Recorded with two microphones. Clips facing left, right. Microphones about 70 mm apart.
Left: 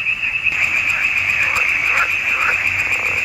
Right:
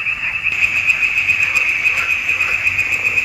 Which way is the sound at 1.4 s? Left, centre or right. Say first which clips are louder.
Even; left.